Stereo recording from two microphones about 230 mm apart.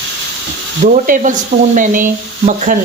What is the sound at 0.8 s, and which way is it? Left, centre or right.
Sizzle, right.